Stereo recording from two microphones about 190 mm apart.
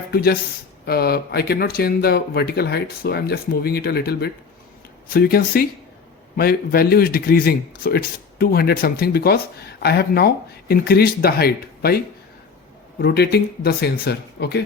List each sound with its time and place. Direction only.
0.1 s a man's voice: 55° left (ahead or behind)
13.0 s speech: 60° left (ahead or behind)